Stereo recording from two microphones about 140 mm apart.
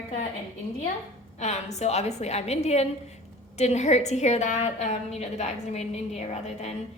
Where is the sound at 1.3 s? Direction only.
50° left (ahead or behind).